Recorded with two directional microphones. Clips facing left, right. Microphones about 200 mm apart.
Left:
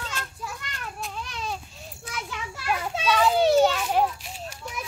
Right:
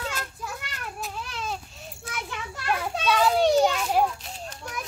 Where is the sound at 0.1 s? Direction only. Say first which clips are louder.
Right 1 dB; 5° right (ahead or behind).